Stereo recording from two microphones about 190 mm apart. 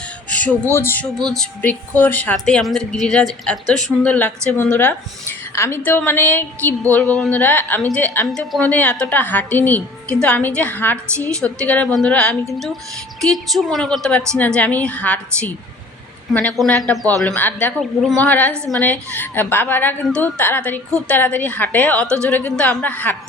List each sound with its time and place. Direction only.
0.3 s a woman's voice: 5° left (ahead or behind)
16.9 s speech: 15° right (ahead or behind)
17.2 s a woman's voice: 10° left (ahead or behind)
18.5 s speech: 15° right (ahead or behind)
18.8 s a woman's voice: 10° left (ahead or behind)